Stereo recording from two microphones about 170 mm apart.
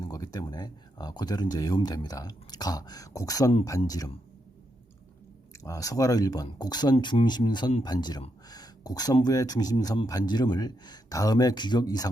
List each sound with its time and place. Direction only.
0.0 s speech: 20° left (ahead or behind)
5.6 s speech: 20° left (ahead or behind)